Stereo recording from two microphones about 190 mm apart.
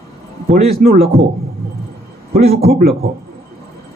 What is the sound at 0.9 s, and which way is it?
Speech, 30° right (ahead or behind).